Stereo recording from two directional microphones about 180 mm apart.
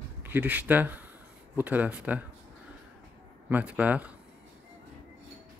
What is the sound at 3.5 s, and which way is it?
Speech, 10° right (ahead or behind).